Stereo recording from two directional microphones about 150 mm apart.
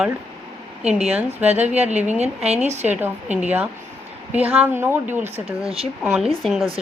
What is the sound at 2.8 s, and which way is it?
A woman's voice, 10° right (ahead or behind).